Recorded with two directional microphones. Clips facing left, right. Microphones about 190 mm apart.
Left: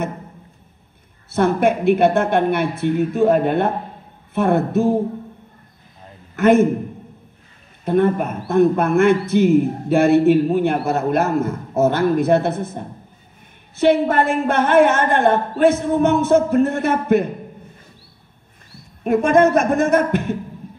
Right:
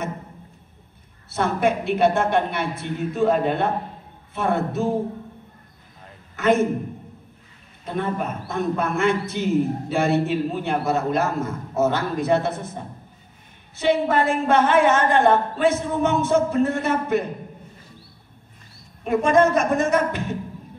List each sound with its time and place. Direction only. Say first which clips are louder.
1.3 s a man's voice: left 5 dB; 55° left (ahead or behind)
6.3 s a man's voice: left 6 dB; 55° left (ahead or behind)
7.8 s a man's voice: left 9 dB; 55° left (ahead or behind)
13.7 s a man's voice: left 5 dB; 55° left (ahead or behind)
19.0 s a man's voice: left 3 dB; 55° left (ahead or behind)